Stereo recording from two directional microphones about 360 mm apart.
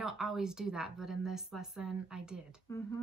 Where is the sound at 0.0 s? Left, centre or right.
Centre.